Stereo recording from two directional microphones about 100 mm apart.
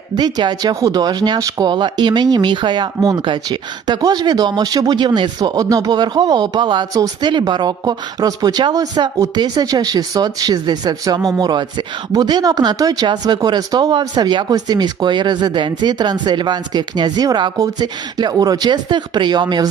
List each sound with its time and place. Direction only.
0.2 s speech: 45° right (ahead or behind)
1.7 s speech: 50° right (ahead or behind)
6.9 s speech: 35° right (ahead or behind)
7.3 s speech: 50° right (ahead or behind)